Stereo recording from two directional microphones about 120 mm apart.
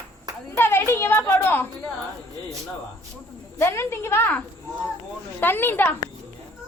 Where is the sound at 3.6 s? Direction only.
20° left (ahead or behind).